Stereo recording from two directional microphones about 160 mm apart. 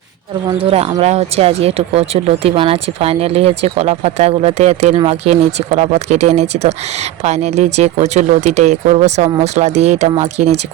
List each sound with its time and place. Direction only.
0.4 s speech: 35° right (ahead or behind)